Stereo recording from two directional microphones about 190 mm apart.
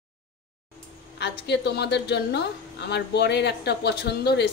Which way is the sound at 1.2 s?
60° left (ahead or behind).